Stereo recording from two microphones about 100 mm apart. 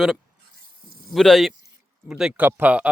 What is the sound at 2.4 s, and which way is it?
Speech, 20° right (ahead or behind).